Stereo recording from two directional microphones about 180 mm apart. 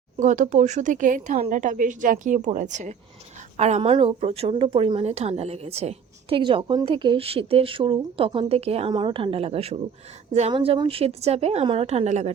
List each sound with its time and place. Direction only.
0.2 s a woman's voice: 45° right (ahead or behind)